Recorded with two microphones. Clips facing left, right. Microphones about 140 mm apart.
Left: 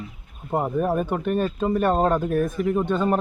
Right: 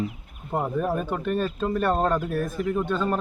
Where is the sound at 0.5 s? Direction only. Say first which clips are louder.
Left 3 dB; 15° left (ahead or behind).